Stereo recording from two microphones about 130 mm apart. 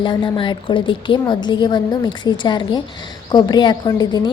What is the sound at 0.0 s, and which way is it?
A woman's voice, 40° left (ahead or behind).